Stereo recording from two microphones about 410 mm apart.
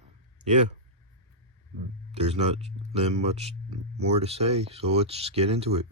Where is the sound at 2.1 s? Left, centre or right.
Centre.